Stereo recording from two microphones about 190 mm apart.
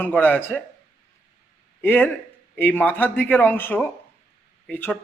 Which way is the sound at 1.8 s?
10° left (ahead or behind).